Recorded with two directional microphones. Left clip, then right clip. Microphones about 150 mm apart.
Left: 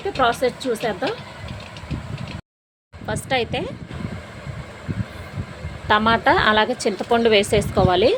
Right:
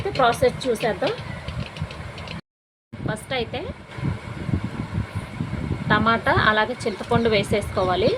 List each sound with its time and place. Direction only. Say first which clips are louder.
0.1 s speech: even; 10° left (ahead or behind)
3.1 s speech: left 4 dB; 50° left (ahead or behind)
5.9 s speech: left 3 dB; 50° left (ahead or behind)